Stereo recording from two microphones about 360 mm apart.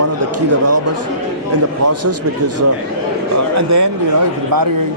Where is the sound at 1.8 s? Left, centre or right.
Right.